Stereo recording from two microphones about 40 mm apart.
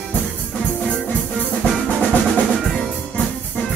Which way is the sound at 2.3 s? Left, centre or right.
Centre.